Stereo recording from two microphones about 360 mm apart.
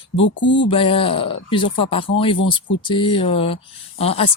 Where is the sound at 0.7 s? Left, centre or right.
Centre.